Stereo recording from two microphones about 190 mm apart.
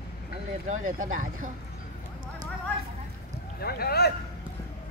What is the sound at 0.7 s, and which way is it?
Speech, 45° right (ahead or behind).